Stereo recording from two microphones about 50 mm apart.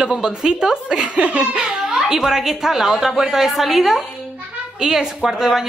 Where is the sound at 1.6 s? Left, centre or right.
Centre.